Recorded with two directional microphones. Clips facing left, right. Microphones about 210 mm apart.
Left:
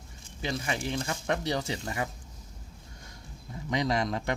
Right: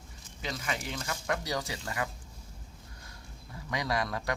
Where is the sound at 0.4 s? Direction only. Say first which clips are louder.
Left 4 dB; 30° left (ahead or behind).